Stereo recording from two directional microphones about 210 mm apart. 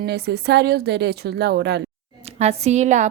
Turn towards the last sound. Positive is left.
turn(degrees=-35)  # may be behind; listen again after turning